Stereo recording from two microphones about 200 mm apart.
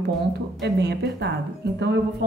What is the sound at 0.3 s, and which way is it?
Speech, 60° right (ahead or behind).